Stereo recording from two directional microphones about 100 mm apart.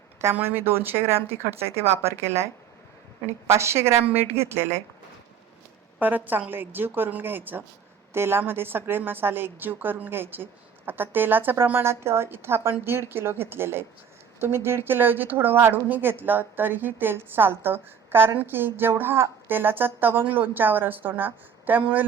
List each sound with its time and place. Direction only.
0.2 s a woman's voice: 25° right (ahead or behind)
6.0 s a woman's voice: 20° right (ahead or behind)